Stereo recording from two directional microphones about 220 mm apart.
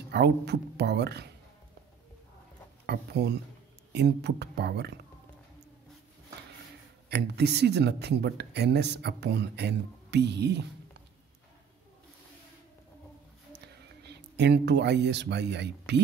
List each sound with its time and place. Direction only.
0.1 s speech: 50° right (ahead or behind)
2.9 s speech: 50° right (ahead or behind)
7.1 s speech: 50° right (ahead or behind)
14.0 s speech: 50° right (ahead or behind)